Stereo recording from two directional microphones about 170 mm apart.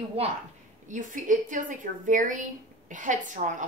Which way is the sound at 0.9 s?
50° right (ahead or behind).